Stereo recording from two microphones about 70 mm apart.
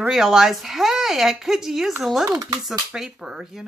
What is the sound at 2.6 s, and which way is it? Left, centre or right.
Speech, centre.